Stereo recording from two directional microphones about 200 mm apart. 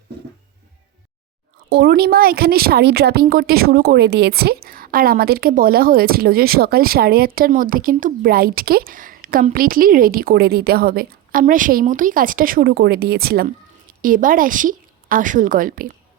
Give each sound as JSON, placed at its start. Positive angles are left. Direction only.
{"t": 1.7, "sound": "speech", "side_deg": -55}